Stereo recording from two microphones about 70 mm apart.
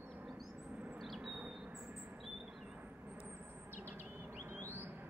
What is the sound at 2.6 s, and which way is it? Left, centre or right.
Vehicle, right.